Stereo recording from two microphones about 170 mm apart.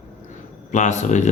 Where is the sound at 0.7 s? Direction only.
45° left (ahead or behind).